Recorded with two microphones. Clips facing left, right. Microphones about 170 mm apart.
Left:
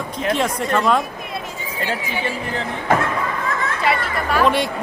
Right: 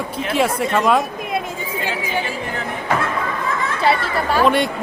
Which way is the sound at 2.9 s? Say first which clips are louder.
Left 3 dB; 50° left (ahead or behind).